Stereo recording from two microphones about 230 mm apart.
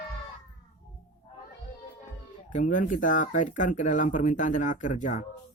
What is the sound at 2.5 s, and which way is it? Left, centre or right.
Speech, left.